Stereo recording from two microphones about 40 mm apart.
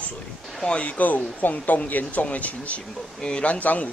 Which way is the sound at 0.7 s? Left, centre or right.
Left.